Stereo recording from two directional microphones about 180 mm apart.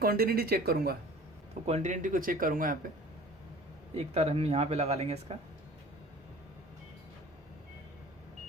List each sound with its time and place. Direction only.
0.0 s speech: 55° right (ahead or behind)
1.6 s speech: 40° right (ahead or behind)
3.9 s speech: 35° right (ahead or behind)